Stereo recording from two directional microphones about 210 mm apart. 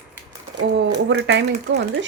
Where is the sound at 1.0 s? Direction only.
60° right (ahead or behind).